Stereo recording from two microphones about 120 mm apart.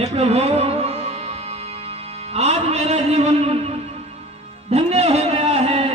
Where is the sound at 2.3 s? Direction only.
60° right (ahead or behind).